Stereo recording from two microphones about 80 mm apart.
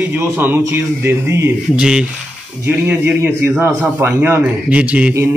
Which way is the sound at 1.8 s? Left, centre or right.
Centre.